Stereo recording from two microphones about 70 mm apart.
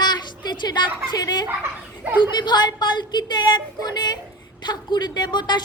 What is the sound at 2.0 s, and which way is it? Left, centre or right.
Speech, right.